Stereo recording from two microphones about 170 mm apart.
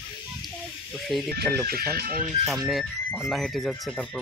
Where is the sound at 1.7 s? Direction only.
65° right (ahead or behind).